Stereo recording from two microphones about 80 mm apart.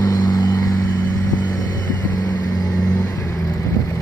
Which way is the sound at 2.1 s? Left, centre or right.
Left.